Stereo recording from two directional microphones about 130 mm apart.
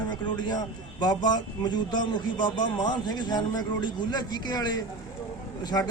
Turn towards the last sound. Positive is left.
turn(degrees=30)  # may be behind; listen again after turning